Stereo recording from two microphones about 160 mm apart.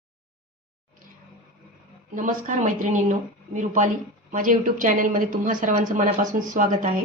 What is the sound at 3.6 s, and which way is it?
A woman's voice, 50° right (ahead or behind).